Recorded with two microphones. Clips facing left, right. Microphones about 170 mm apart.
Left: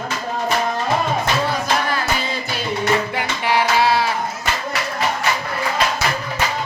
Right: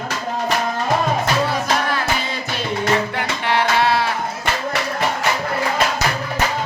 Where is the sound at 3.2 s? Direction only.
10° left (ahead or behind).